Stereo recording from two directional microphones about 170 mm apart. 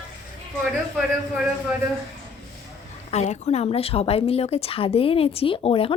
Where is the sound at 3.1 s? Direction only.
40° left (ahead or behind).